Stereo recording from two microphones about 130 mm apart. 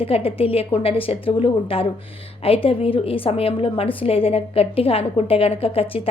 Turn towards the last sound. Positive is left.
turn(degrees=50)  # may be behind; listen again after turning